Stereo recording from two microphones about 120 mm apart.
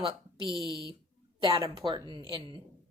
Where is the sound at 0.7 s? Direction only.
30° left (ahead or behind).